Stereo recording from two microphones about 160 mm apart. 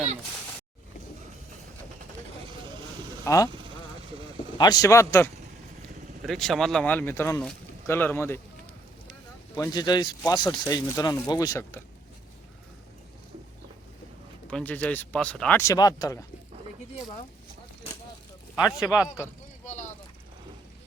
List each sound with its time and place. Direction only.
3.2 s speech: 20° left (ahead or behind)
4.5 s speech: 25° left (ahead or behind)
6.2 s speech: centre (ahead or behind)
9.6 s speech: 25° left (ahead or behind)
14.5 s speech: 10° left (ahead or behind)
18.5 s speech: 5° right (ahead or behind)
18.9 s speech: 20° left (ahead or behind)
19.6 s vehicle: 50° left (ahead or behind)